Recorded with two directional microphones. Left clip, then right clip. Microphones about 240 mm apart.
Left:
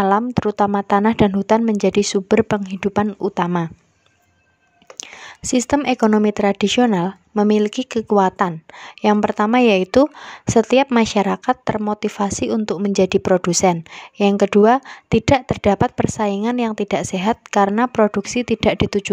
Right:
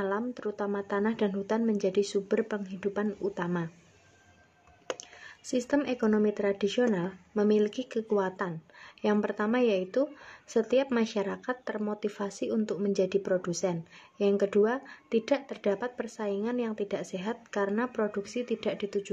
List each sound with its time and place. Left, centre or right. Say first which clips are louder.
0.0 s a woman's voice: left 15 dB; left
5.5 s a woman's voice: left 11 dB; left